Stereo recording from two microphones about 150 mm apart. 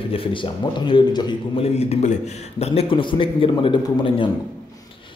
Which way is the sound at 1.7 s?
50° left (ahead or behind).